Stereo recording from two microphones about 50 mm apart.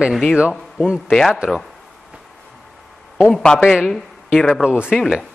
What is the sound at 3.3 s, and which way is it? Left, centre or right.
Speech, centre.